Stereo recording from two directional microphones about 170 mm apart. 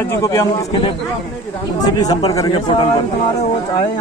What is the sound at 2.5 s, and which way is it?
Speech, 30° left (ahead or behind).